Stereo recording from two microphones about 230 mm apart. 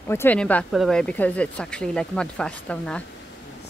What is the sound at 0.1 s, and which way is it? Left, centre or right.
Speech, centre.